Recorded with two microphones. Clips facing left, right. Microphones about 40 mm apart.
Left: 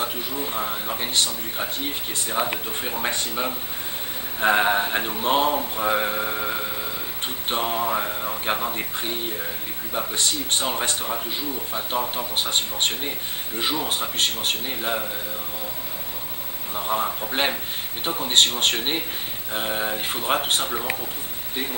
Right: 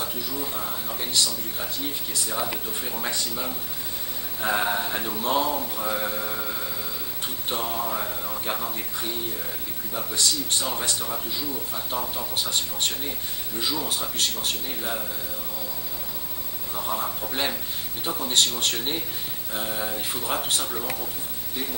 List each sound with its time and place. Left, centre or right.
0.0 s speech: left
16.7 s speech: left